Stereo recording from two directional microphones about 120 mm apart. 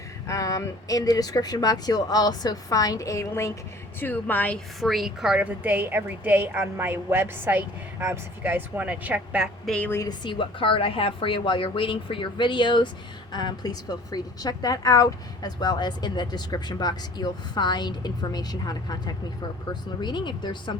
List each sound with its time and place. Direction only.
0.3 s speech: 25° left (ahead or behind)
4.0 s speech: 15° left (ahead or behind)
4.8 s a woman's voice: centre (ahead or behind)
9.6 s speech: 10° left (ahead or behind)
9.9 s speech: 30° left (ahead or behind)
10.2 s a woman's voice: 45° left (ahead or behind)